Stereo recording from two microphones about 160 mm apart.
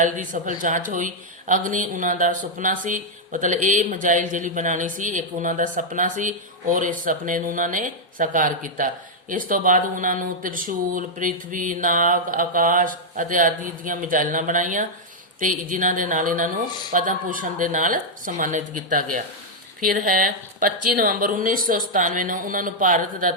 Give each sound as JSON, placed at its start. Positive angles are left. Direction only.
{"t": 0.0, "sound": "speech", "side_deg": -55}